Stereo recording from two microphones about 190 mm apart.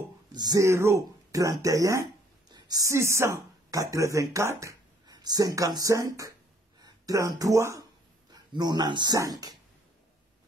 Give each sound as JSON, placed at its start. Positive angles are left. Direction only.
{"t": 0.3, "sound": "speech", "side_deg": -20}